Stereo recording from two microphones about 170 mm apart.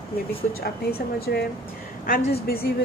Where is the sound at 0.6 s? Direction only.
65° left (ahead or behind).